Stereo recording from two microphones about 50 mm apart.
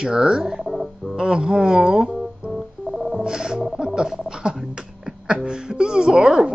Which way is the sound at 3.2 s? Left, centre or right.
Centre.